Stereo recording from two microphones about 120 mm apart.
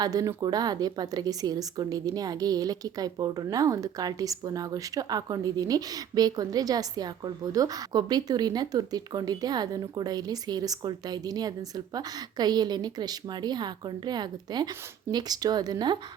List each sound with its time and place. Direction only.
0.0 s speech: 30° right (ahead or behind)